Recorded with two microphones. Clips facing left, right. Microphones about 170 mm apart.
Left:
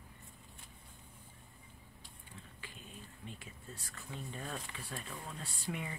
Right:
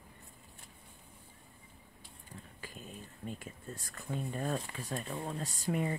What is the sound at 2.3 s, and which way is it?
Speech, 40° right (ahead or behind).